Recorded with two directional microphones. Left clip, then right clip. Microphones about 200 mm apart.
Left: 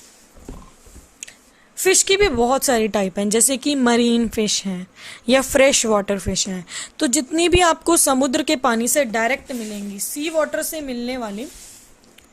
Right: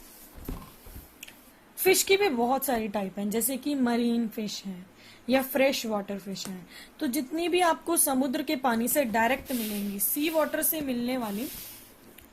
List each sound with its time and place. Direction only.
1.7 s a woman's voice: 40° left (ahead or behind)